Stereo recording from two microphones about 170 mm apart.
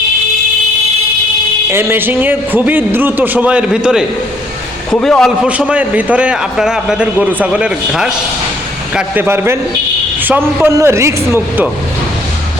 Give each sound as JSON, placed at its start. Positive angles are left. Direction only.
{"t": 1.7, "sound": "a man's voice", "side_deg": -15}
{"t": 5.5, "sound": "a man's voice", "side_deg": -10}